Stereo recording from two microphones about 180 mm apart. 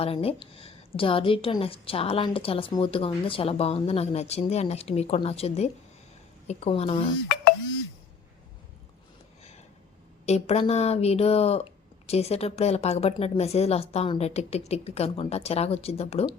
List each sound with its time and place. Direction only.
0.0 s a woman's voice: 30° left (ahead or behind)
10.2 s a woman's voice: 35° left (ahead or behind)